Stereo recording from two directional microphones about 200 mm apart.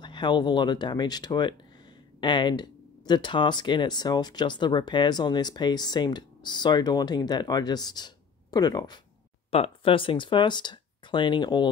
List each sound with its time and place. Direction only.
0.0 s speech: 20° left (ahead or behind)